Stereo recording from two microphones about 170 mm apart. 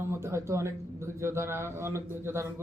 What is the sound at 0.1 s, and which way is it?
A man's voice, 15° right (ahead or behind).